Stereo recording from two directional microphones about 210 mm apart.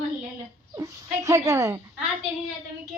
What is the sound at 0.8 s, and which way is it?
Humming, 15° right (ahead or behind).